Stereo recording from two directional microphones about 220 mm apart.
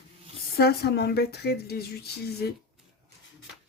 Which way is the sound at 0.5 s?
45° left (ahead or behind).